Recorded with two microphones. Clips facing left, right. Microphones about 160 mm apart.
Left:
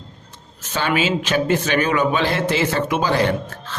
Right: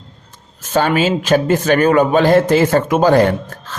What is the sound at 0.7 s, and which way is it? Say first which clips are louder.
A man's voice: right 6 dB; 45° right (ahead or behind).